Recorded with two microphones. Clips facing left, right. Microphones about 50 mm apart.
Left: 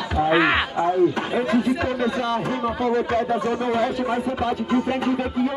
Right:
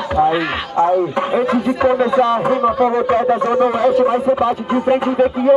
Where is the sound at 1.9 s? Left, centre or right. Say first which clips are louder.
Right 10 dB; centre.